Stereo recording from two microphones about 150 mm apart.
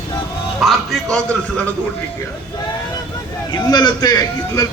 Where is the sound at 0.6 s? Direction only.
Centre (ahead or behind).